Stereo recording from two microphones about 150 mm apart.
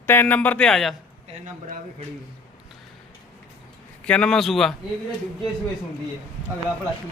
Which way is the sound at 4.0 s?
5° left (ahead or behind).